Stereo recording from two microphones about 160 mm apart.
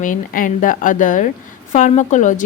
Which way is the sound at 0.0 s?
55° left (ahead or behind).